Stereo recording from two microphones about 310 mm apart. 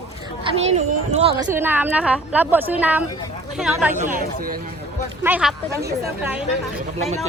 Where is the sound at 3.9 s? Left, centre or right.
Right.